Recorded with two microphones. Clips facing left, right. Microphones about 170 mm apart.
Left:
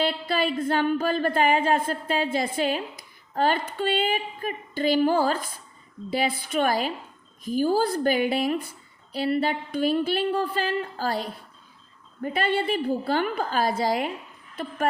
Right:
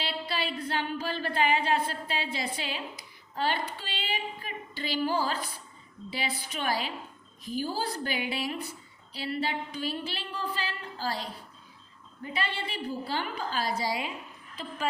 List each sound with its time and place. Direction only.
0.0 s speech: 50° left (ahead or behind)